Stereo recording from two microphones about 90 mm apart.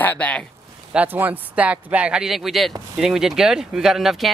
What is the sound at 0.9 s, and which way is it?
Speech, 20° right (ahead or behind).